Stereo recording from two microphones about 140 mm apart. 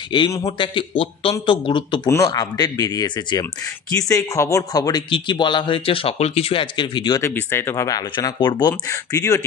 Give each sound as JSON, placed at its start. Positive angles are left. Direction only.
{"t": 0.1, "sound": "a man's voice", "side_deg": 35}
{"t": 2.0, "sound": "a man's voice", "side_deg": 25}
{"t": 7.2, "sound": "speech", "side_deg": 20}